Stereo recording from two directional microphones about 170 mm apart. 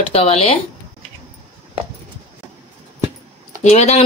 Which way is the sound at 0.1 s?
35° left (ahead or behind).